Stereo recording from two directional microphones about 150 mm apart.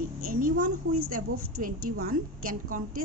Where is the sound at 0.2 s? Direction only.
70° right (ahead or behind).